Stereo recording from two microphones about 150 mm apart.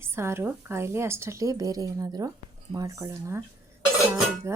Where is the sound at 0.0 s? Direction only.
15° right (ahead or behind).